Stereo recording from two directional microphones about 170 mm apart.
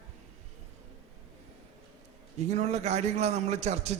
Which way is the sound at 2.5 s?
40° right (ahead or behind).